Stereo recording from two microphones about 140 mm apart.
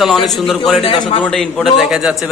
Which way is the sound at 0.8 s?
40° left (ahead or behind).